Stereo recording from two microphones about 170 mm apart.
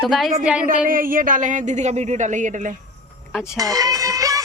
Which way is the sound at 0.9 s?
55° right (ahead or behind).